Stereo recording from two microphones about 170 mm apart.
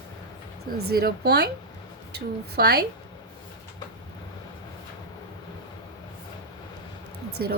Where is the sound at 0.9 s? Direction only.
65° right (ahead or behind).